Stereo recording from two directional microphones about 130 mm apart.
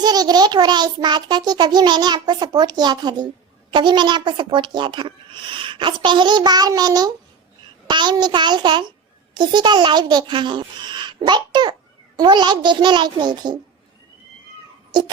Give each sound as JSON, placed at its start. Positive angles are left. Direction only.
{"t": 0.0, "sound": "a child's voice", "side_deg": -30}